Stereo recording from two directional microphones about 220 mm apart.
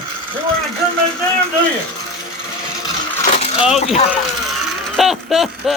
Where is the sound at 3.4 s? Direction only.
25° left (ahead or behind).